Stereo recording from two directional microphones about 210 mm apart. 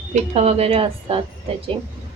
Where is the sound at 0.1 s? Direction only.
30° right (ahead or behind).